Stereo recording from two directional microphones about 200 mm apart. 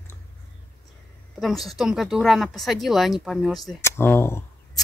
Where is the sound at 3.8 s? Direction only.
10° left (ahead or behind).